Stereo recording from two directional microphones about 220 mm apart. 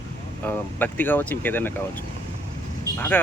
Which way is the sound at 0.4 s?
10° left (ahead or behind).